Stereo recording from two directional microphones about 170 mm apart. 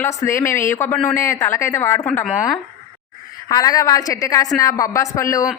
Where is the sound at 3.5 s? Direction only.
20° left (ahead or behind).